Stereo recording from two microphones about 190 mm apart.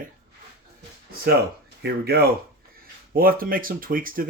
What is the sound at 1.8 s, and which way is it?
Speech, 55° right (ahead or behind).